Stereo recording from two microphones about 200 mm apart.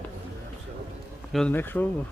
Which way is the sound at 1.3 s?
5° left (ahead or behind).